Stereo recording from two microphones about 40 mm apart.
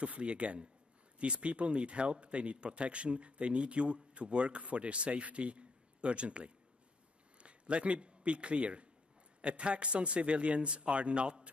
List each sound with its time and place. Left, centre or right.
0.0 s a man's voice: right